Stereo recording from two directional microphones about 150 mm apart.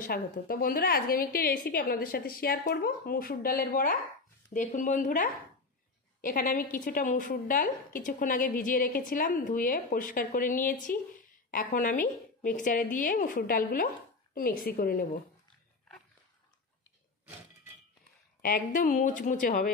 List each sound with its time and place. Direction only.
0.0 s a woman's voice: 80° left
4.6 s a woman's voice: 55° left (ahead or behind)
18.4 s a woman's voice: 70° left (ahead or behind)